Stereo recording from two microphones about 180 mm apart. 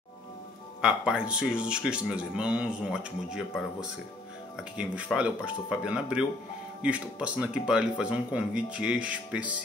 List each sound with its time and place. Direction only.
0.7 s speech: 5° right (ahead or behind)
4.7 s speech: 5° right (ahead or behind)